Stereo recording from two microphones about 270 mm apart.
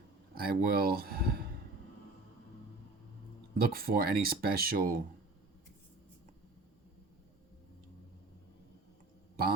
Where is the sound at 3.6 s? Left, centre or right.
Right.